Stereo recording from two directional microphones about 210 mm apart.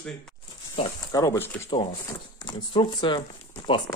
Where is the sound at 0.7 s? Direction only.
15° left (ahead or behind).